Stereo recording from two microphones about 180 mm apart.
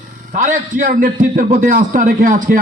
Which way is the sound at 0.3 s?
45° right (ahead or behind).